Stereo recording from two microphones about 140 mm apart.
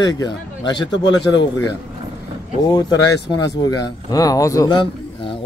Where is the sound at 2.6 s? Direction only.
30° left (ahead or behind).